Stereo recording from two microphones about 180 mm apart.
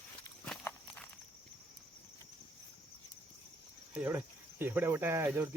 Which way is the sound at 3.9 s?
10° right (ahead or behind).